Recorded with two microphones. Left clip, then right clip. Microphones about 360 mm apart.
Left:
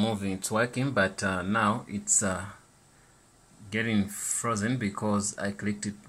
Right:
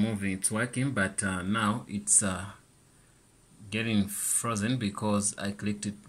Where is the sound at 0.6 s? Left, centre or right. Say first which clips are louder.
Left 3 dB; centre.